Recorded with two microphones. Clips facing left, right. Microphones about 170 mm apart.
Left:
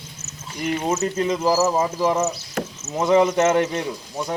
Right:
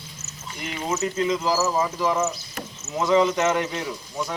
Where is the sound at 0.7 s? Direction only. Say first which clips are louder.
Left 4 dB; 40° left (ahead or behind).